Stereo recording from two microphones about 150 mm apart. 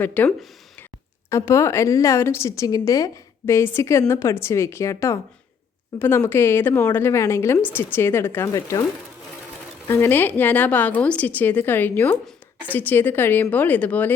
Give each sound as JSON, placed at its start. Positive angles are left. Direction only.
{"t": 0.0, "sound": "a woman's voice", "side_deg": 10}
{"t": 9.8, "sound": "a woman's voice", "side_deg": 15}